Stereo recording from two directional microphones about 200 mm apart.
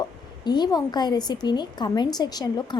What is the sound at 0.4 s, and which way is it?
A woman's voice, 20° left (ahead or behind).